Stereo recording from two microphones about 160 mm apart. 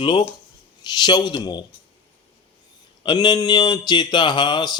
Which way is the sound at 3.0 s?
30° left (ahead or behind).